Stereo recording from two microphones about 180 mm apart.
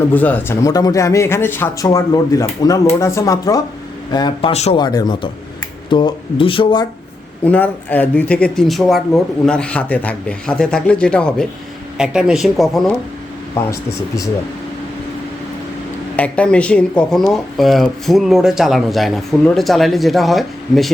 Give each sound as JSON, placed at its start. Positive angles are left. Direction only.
{"t": 0.1, "sound": "speech", "side_deg": 10}
{"t": 4.8, "sound": "speech", "side_deg": 20}
{"t": 7.4, "sound": "speech", "side_deg": 10}
{"t": 13.6, "sound": "speech", "side_deg": 15}
{"t": 16.1, "sound": "speech", "side_deg": 5}